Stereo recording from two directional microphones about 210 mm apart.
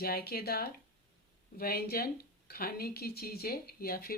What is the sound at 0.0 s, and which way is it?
Speech, 45° left (ahead or behind).